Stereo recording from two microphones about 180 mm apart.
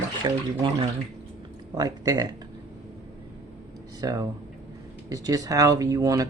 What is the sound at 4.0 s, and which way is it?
Speech, 20° right (ahead or behind).